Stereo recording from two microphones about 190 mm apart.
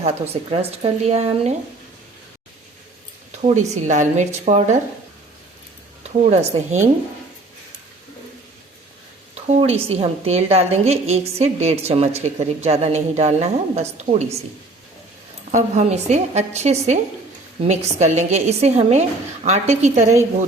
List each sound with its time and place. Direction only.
0.0 s a woman's voice: 30° right (ahead or behind)
3.4 s a woman's voice: 35° right (ahead or behind)
6.0 s speech: 35° right (ahead or behind)
9.3 s a woman's voice: 35° right (ahead or behind)
15.5 s a woman's voice: 35° right (ahead or behind)